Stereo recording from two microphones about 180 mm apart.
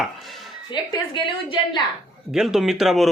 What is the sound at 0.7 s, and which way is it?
A woman's voice, 25° left (ahead or behind).